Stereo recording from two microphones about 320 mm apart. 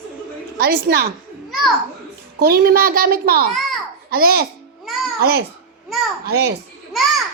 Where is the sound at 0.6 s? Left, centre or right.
Right.